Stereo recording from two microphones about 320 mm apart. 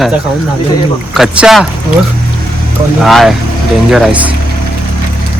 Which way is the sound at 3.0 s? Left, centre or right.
Centre.